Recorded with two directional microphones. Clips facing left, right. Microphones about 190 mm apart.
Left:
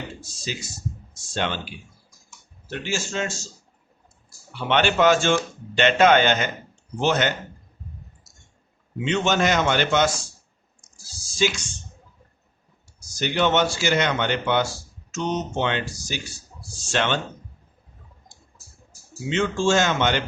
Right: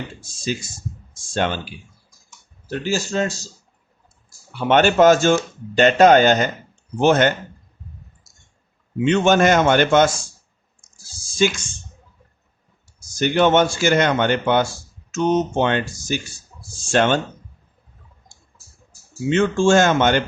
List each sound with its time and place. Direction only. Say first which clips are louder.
1.3 s speech: right 5 dB; 45° right (ahead or behind)
4.7 s speech: right 5 dB; 45° right (ahead or behind)
7.0 s speech: right 6 dB; 50° right (ahead or behind)
9.0 s speech: right 6 dB; 50° right (ahead or behind)
11.3 s speech: right 4 dB; 50° right (ahead or behind)
13.1 s speech: right 5 dB; 50° right (ahead or behind)
19.3 s speech: right 5 dB; 50° right (ahead or behind)